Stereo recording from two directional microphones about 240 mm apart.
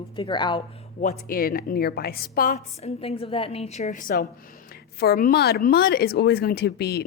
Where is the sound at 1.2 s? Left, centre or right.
Left.